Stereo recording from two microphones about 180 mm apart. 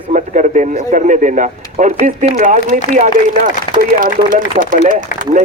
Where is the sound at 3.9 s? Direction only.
50° right (ahead or behind).